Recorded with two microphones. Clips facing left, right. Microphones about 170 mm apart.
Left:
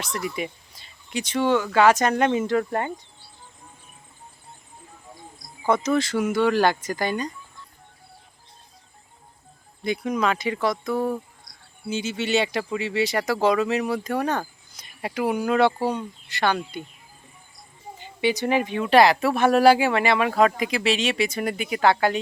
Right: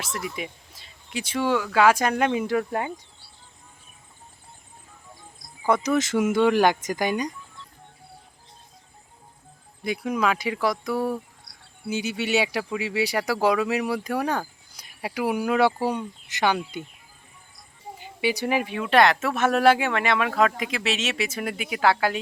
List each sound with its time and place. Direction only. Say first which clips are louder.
0.0 s speech: left 3 dB; 5° right (ahead or behind)
5.6 s speech: left 1 dB; 10° right (ahead or behind)
6.1 s speech: right 3 dB; 20° right (ahead or behind)
9.8 s speech: left 1 dB; 5° right (ahead or behind)
18.0 s speech: left 2 dB; 10° right (ahead or behind)